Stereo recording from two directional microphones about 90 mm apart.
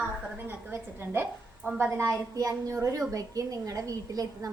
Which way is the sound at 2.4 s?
40° right (ahead or behind).